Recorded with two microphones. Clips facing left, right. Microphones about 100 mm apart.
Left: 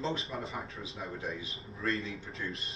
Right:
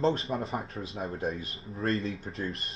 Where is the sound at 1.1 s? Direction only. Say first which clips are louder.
Right 6 dB; 50° right (ahead or behind).